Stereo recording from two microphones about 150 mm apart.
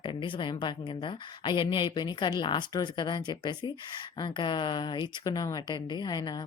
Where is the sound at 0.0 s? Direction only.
35° left (ahead or behind).